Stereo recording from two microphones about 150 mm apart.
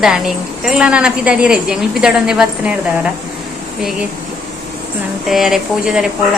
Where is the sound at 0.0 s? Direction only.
Centre (ahead or behind).